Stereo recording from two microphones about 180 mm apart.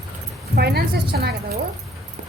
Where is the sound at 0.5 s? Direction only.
60° right (ahead or behind).